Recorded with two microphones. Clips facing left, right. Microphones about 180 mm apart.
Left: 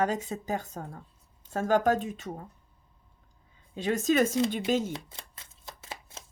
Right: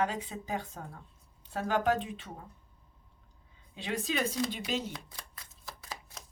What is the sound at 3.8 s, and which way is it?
Speech, 45° left (ahead or behind).